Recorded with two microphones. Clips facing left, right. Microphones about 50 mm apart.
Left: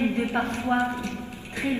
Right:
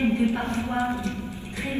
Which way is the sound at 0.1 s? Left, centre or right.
Left.